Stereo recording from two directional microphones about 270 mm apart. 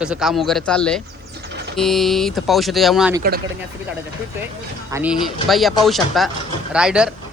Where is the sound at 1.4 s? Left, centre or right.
Right.